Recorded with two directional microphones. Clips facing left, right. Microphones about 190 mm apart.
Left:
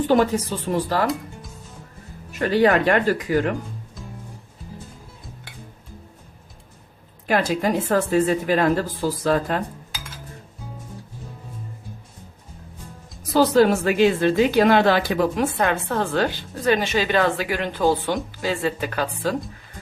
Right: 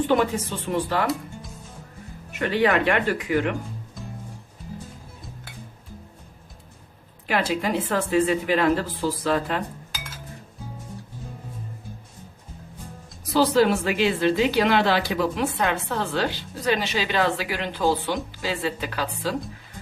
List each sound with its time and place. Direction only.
0.1 s speech: 40° left (ahead or behind)
2.4 s speech: 40° left (ahead or behind)
7.3 s speech: 45° left (ahead or behind)
13.3 s speech: 45° left (ahead or behind)